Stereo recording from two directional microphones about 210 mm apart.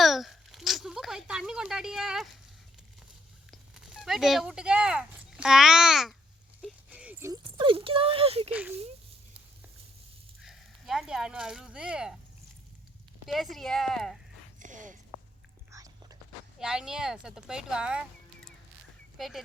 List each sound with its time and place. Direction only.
0.0 s a sound: centre (ahead or behind)
3.5 s speech: centre (ahead or behind)
6.6 s a sound: centre (ahead or behind)
7.6 s speech: 25° right (ahead or behind)
10.4 s speech: centre (ahead or behind)
13.2 s a woman's voice: centre (ahead or behind)
14.6 s a sound: 35° right (ahead or behind)
15.7 s biting: 15° right (ahead or behind)
16.6 s speech: 5° right (ahead or behind)